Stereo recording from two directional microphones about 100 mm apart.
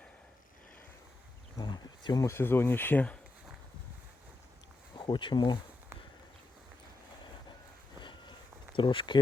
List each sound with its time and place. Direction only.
1.5 s speech: 45° left (ahead or behind)
2.2 s speech: 25° left (ahead or behind)
4.9 s speech: 50° left (ahead or behind)
7.9 s a sound: 50° left (ahead or behind)
8.7 s speech: 60° left (ahead or behind)